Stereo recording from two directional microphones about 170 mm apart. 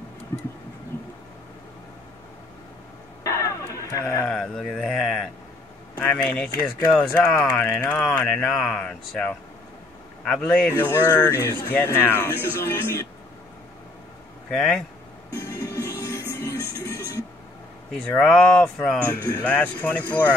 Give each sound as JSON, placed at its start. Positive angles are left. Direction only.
{"t": 3.3, "sound": "a sound", "side_deg": 20}
{"t": 4.3, "sound": "speech", "side_deg": 5}
{"t": 14.5, "sound": "speech", "side_deg": 5}
{"t": 16.0, "sound": "music", "side_deg": 20}
{"t": 17.9, "sound": "speech", "side_deg": 5}